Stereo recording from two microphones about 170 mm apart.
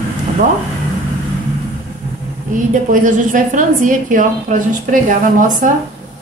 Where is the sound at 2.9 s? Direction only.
50° right (ahead or behind).